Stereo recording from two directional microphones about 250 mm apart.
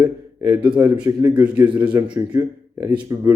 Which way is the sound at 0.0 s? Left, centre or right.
Centre.